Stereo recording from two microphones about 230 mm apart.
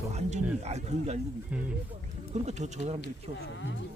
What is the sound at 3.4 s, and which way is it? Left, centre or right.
Speech, left.